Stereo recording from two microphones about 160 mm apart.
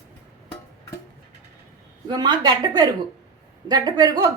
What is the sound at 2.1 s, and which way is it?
A woman's voice, 25° right (ahead or behind).